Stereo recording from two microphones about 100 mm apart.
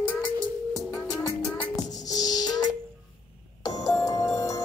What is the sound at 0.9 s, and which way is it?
Music, 35° left (ahead or behind).